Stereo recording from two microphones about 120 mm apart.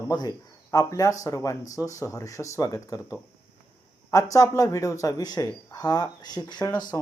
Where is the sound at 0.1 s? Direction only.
35° left (ahead or behind).